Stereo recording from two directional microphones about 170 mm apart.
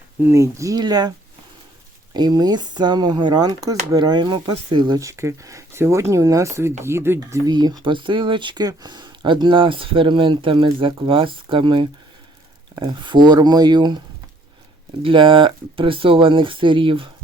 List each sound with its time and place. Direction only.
0.3 s speech: 15° right (ahead or behind)
2.1 s speech: 25° right (ahead or behind)
15.0 s speech: 30° right (ahead or behind)